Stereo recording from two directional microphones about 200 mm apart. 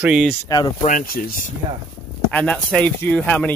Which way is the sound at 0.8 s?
45° left (ahead or behind).